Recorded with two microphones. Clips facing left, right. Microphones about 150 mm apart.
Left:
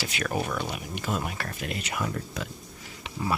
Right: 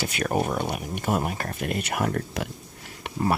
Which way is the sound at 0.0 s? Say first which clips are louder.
Right 5 dB; 45° right (ahead or behind).